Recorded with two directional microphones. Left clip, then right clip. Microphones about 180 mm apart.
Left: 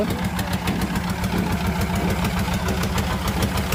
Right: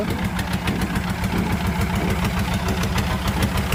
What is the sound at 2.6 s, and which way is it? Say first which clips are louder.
Engine: even; 10° right (ahead or behind).